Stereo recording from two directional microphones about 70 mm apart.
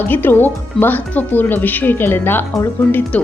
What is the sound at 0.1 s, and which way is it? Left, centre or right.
A woman's voice, left.